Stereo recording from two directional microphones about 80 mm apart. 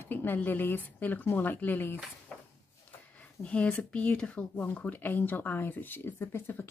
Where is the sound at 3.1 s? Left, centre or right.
Centre.